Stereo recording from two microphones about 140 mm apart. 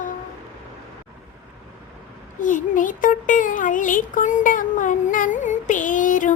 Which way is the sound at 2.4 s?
70° left (ahead or behind).